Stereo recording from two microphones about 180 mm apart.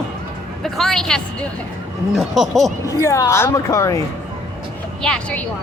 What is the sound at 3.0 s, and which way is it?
Speech, 15° left (ahead or behind).